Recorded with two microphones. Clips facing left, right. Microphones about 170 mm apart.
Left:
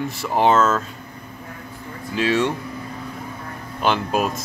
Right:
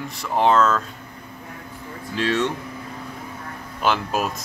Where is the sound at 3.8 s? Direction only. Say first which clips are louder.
Left 2 dB; 5° right (ahead or behind).